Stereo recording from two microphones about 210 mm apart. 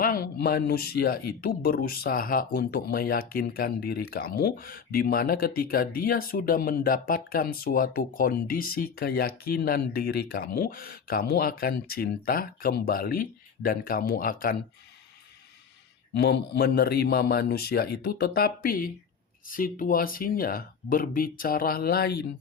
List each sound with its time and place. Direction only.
0.0 s speech: 45° left (ahead or behind)
16.1 s speech: 55° left (ahead or behind)